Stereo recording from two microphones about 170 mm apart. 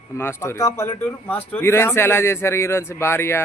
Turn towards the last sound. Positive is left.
turn(degrees=15)  # may be behind; listen again after turning